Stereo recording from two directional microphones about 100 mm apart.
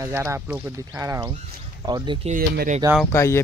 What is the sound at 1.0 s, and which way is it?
Speech, 30° right (ahead or behind).